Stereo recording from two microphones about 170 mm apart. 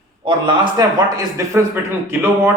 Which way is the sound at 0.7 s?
20° right (ahead or behind).